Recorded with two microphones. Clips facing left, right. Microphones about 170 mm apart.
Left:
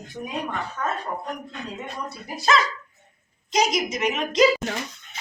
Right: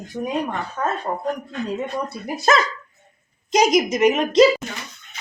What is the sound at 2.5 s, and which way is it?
A woman's voice, 45° right (ahead or behind).